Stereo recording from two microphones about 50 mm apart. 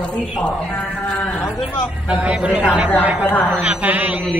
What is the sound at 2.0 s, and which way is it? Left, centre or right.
Speech, right.